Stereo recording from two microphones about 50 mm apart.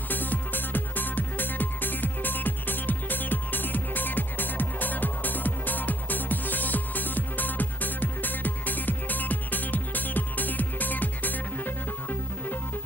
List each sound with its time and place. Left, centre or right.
0.1 s music: left